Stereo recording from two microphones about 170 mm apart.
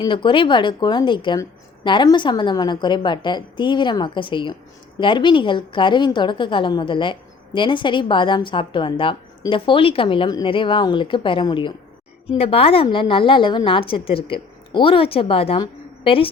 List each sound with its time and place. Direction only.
0.0 s a woman's voice: 30° left (ahead or behind)